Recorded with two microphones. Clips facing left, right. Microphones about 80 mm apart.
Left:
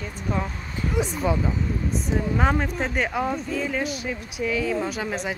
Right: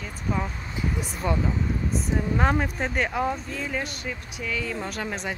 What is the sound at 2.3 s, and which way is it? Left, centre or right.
Speech, centre.